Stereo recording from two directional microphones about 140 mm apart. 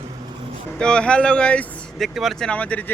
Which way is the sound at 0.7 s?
5° left (ahead or behind).